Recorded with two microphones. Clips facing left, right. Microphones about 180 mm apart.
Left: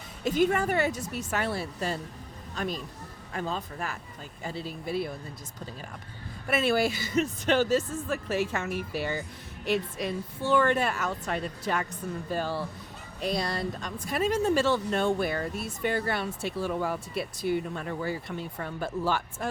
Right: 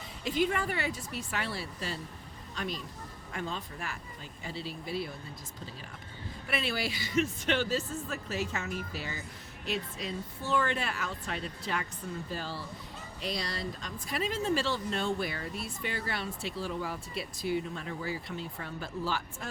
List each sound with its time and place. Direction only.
0.3 s speech: 45° left (ahead or behind)
6.5 s speech: 50° left (ahead or behind)